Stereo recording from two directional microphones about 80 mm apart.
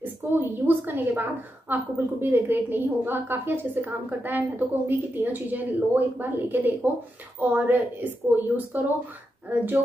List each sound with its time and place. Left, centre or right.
0.0 s a woman's voice: right